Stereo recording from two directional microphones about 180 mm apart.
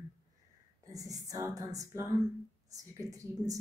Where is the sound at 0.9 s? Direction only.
20° right (ahead or behind).